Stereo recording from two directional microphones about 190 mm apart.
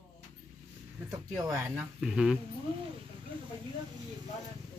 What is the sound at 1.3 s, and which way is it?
Speech, 15° right (ahead or behind).